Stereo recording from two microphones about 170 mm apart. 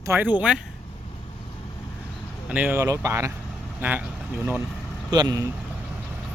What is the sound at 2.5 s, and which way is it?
Speech, 10° right (ahead or behind).